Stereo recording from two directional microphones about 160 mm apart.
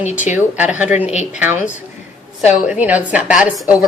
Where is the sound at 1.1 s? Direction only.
45° left (ahead or behind).